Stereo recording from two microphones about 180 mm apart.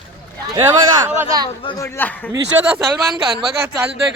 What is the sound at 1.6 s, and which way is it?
Speech, 25° left (ahead or behind).